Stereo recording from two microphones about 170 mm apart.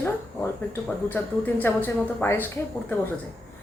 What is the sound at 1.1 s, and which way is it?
A woman's voice, 10° left (ahead or behind).